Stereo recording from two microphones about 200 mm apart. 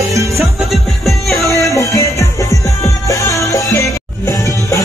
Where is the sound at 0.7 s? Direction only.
Centre (ahead or behind).